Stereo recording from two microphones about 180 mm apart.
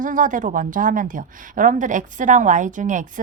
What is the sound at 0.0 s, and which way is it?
Speech, 45° right (ahead or behind).